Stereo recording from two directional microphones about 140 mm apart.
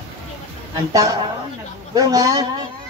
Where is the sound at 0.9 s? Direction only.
25° right (ahead or behind).